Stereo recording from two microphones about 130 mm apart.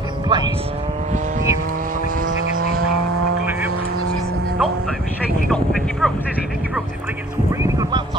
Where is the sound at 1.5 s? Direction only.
90° right.